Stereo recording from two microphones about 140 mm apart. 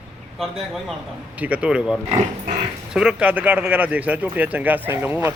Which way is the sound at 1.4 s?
10° right (ahead or behind).